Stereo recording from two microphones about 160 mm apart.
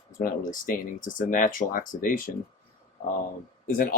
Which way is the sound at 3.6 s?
65° left (ahead or behind).